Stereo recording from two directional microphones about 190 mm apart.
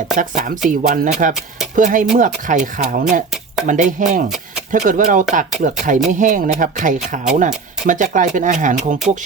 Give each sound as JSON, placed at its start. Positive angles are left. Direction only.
{"t": 0.2, "sound": "speech", "side_deg": -45}